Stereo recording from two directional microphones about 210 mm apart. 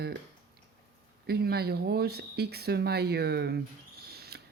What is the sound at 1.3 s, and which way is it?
Speech, 50° right (ahead or behind).